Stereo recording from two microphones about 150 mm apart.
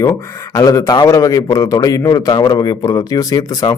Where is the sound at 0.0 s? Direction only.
20° left (ahead or behind).